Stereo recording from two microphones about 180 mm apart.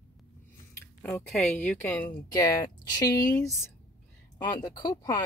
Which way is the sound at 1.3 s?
5° left (ahead or behind).